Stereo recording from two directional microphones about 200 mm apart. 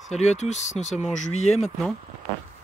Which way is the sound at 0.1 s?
35° left (ahead or behind).